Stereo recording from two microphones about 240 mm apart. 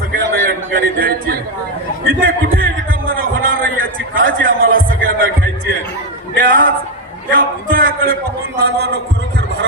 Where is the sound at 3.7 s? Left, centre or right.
Right.